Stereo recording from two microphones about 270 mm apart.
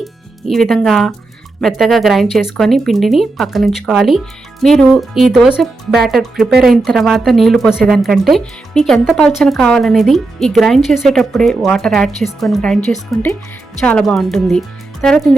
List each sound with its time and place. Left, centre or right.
0.0 s speech: centre